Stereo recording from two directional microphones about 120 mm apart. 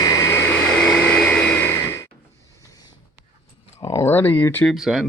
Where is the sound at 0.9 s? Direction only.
10° left (ahead or behind).